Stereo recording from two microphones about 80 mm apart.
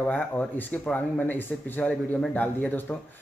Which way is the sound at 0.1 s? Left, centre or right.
Left.